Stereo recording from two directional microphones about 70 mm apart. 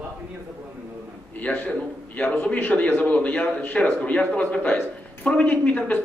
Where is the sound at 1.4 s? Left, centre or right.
Left.